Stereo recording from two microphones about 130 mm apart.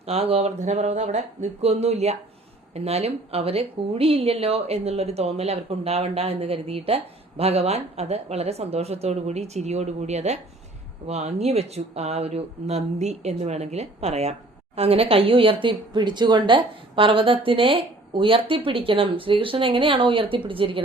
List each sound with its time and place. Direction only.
0.0 s a woman's voice: 50° right (ahead or behind)